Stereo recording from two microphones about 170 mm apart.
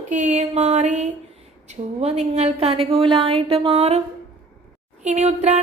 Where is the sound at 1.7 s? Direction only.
40° right (ahead or behind).